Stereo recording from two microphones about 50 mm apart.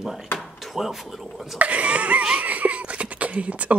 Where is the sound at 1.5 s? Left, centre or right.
Right.